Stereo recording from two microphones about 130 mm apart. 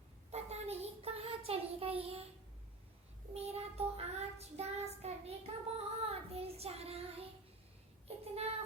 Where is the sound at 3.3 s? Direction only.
55° right (ahead or behind).